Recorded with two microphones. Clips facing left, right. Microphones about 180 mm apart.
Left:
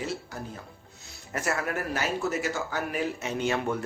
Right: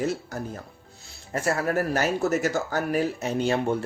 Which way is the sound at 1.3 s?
30° right (ahead or behind).